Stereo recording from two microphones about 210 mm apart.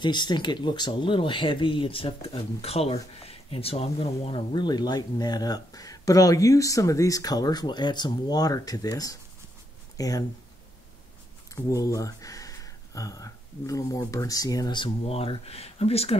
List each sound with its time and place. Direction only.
0.0 s speech: 20° left (ahead or behind)
11.5 s speech: 15° left (ahead or behind)